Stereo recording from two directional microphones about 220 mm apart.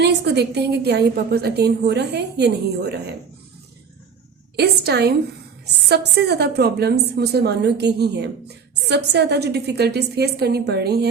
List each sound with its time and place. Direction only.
0.0 s a woman's voice: 50° right (ahead or behind)
4.5 s a woman's voice: 45° right (ahead or behind)